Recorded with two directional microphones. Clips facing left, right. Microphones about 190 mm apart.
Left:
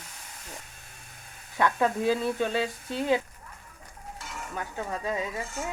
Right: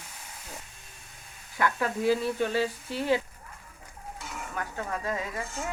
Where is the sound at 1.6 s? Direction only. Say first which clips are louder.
Left 3 dB; 20° left (ahead or behind).